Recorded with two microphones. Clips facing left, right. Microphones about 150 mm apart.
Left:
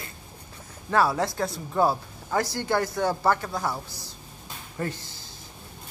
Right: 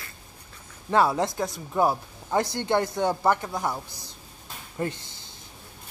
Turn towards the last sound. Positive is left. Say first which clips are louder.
# right 1 dB
turn(degrees=-20)  # may be behind; listen again after turning